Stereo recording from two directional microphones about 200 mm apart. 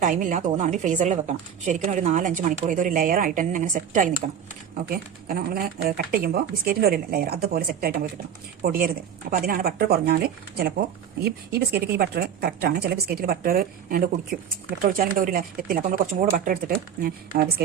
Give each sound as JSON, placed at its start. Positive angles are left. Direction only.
{"t": 0.0, "sound": "a woman's voice", "side_deg": -40}